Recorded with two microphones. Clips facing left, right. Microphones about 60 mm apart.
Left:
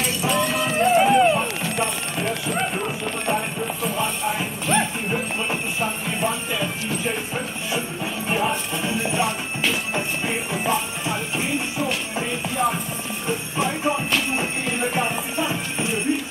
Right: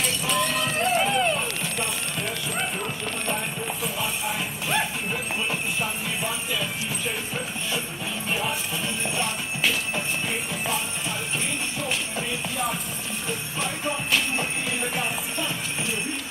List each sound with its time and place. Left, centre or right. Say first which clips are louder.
0.0 s music: left 3 dB; centre
1.0 s clip-clop: left 7 dB; centre
3.8 s jingle bell: left 6 dB; centre
8.3 s music: left 5 dB; centre
9.0 s music: left 5 dB; centre
9.9 s jingle bell: left 3 dB; centre
11.1 s music: left 6 dB; centre
15.0 s clip-clop: left 5 dB; centre